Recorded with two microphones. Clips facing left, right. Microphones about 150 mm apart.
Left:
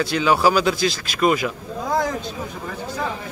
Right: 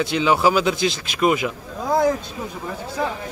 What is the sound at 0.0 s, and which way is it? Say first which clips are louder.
Speech: even; 20° right (ahead or behind).